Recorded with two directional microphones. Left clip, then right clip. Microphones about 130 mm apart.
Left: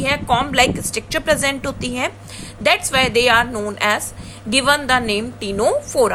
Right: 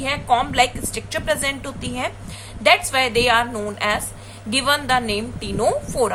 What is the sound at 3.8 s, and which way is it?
A woman's voice, 45° left (ahead or behind).